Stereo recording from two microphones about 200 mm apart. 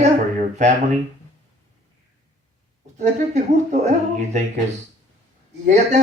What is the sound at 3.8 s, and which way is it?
Speech, 35° right (ahead or behind).